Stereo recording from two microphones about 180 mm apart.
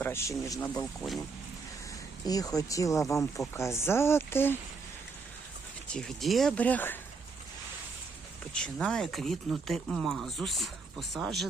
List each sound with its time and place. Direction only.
0.0 s speech: 15° left (ahead or behind)
2.2 s speech: 20° left (ahead or behind)
5.9 s speech: 5° left (ahead or behind)
8.6 s speech: 5° left (ahead or behind)